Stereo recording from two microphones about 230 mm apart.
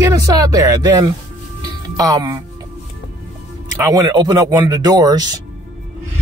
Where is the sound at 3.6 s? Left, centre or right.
Centre.